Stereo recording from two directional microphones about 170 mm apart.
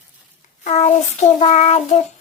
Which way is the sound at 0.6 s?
45° left (ahead or behind).